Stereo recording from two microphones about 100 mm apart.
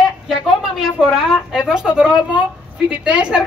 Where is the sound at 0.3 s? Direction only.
5° right (ahead or behind).